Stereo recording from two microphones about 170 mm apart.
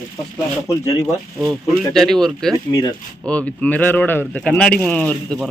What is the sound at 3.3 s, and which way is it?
Speech, 10° left (ahead or behind).